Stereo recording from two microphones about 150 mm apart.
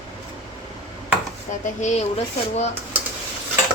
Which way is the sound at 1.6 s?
55° left (ahead or behind).